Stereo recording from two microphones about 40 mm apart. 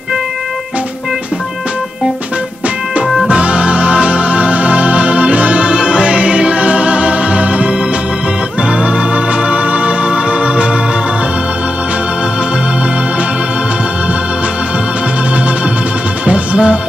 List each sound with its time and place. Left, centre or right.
3.3 s music: right
8.6 s organ: right
16.3 s music: right